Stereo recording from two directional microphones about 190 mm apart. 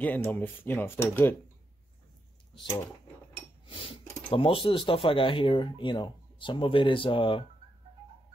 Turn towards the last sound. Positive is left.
turn(degrees=25)  # may be behind; listen again after turning